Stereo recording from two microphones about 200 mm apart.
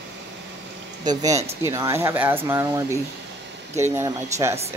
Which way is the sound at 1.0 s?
15° right (ahead or behind).